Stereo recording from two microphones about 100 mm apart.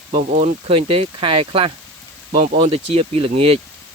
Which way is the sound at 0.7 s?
70° right (ahead or behind).